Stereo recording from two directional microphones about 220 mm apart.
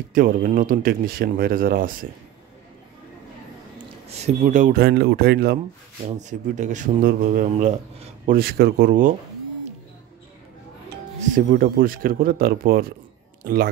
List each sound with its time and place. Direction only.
0.1 s speech: 40° right (ahead or behind)
3.7 s speech: 30° right (ahead or behind)
4.8 s speech: 45° right (ahead or behind)
6.0 s speech: 35° right (ahead or behind)
11.1 s a man's voice: 40° right (ahead or behind)